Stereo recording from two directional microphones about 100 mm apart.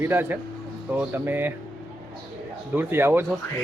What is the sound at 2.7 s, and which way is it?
Speech, 20° right (ahead or behind).